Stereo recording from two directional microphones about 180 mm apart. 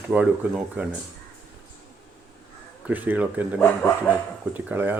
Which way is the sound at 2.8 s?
10° right (ahead or behind).